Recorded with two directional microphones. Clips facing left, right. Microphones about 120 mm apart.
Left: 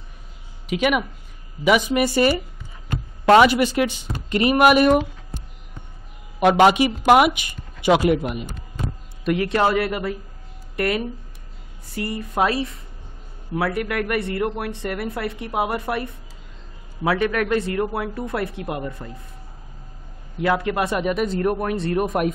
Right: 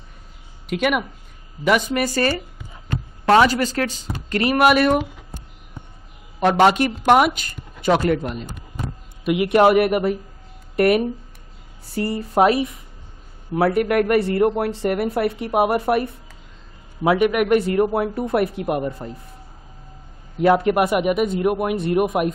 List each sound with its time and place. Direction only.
0.7 s speech: centre (ahead or behind)
2.1 s speech: 15° left (ahead or behind)
6.4 s speech: 5° left (ahead or behind)
9.2 s a man's voice: 10° right (ahead or behind)
9.5 s speech: 20° right (ahead or behind)
17.0 s speech: 20° right (ahead or behind)
20.4 s speech: 20° right (ahead or behind); by 22.3 s 5° right (ahead or behind)